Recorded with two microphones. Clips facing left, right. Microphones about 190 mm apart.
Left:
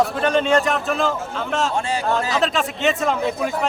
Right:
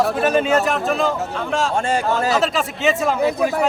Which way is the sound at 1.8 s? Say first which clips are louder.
Right 4 dB; 50° right (ahead or behind).